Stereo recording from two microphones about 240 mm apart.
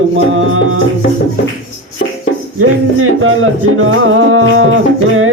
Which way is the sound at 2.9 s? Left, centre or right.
Right.